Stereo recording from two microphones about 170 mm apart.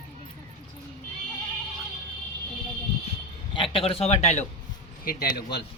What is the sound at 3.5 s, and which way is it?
Speech, 30° left (ahead or behind).